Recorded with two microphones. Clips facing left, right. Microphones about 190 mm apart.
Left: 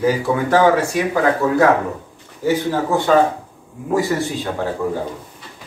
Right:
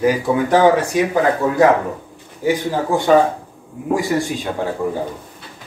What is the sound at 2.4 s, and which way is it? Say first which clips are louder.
Speech: even; 15° right (ahead or behind).